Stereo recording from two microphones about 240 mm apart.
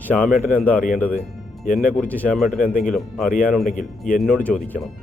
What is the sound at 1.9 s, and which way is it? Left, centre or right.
Speech, centre.